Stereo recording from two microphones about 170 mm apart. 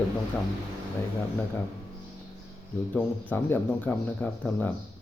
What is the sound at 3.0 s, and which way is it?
Speech, 10° left (ahead or behind).